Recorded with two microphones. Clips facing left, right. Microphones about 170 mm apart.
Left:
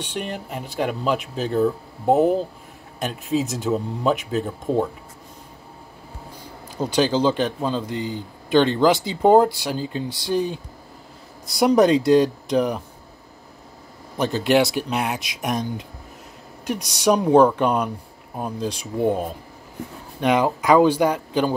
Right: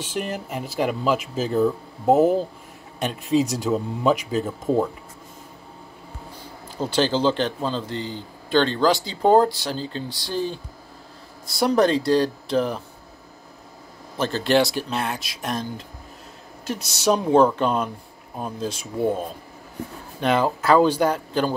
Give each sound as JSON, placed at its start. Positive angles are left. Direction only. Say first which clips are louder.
{"t": 0.0, "sound": "speech", "louder": "right 1 dB", "side_deg": 0}
{"t": 6.8, "sound": "speech", "louder": "left 2 dB", "side_deg": 5}
{"t": 9.1, "sound": "speech", "louder": "left 1 dB", "side_deg": 5}
{"t": 11.5, "sound": "speech", "louder": "left 3 dB", "side_deg": 20}
{"t": 14.4, "sound": "speech", "louder": "left 1 dB", "side_deg": 0}
{"t": 14.9, "sound": "speech", "louder": "left 2 dB", "side_deg": 15}
{"t": 16.6, "sound": "speech", "louder": "left 2 dB", "side_deg": 15}